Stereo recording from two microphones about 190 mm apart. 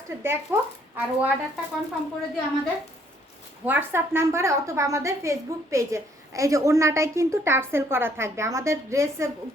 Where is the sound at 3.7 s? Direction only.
10° right (ahead or behind).